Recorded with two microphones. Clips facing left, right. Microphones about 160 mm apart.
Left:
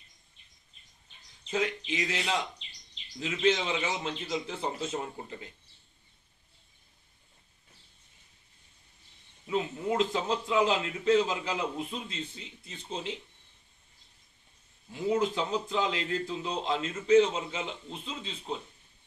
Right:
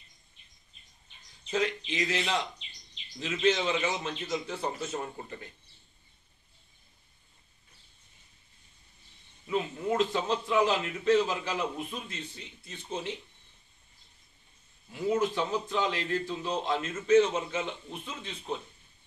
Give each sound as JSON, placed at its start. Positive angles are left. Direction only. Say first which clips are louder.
{"t": 1.5, "sound": "a man's voice", "louder": "right 1 dB", "side_deg": 10}
{"t": 9.5, "sound": "a man's voice", "louder": "even", "side_deg": 15}
{"t": 15.0, "sound": "a man's voice", "louder": "even", "side_deg": 15}